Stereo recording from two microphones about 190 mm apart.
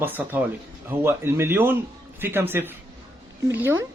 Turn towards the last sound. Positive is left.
turn(degrees=-10)  # may be behind; listen again after turning